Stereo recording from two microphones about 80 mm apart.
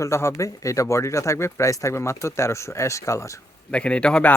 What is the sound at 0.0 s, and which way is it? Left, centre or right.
Speech, left.